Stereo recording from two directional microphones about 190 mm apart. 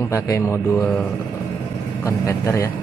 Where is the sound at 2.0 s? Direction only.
15° left (ahead or behind).